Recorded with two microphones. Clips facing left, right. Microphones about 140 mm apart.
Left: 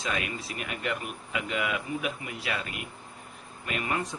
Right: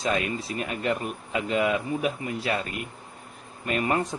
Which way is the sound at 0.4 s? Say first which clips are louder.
Right 6 dB; 30° right (ahead or behind).